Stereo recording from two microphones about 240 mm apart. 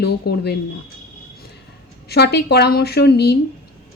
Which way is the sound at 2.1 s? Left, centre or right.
Left.